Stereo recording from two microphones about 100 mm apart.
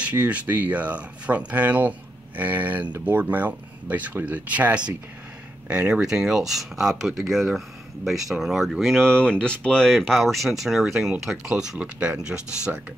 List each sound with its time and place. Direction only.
0.0 s speech: 15° right (ahead or behind)